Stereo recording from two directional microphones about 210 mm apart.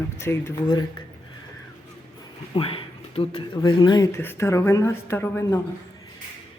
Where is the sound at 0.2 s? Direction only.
15° left (ahead or behind).